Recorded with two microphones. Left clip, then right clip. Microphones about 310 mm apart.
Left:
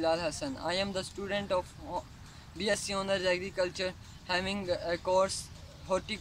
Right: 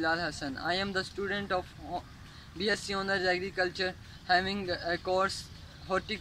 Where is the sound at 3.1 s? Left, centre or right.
Left.